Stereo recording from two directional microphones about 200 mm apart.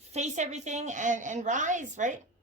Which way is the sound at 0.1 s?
35° right (ahead or behind).